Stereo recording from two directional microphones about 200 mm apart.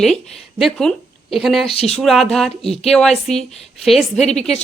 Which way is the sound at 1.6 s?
30° left (ahead or behind).